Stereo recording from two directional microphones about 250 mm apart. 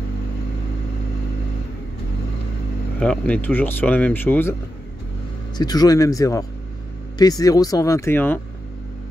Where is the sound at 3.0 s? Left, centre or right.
Centre.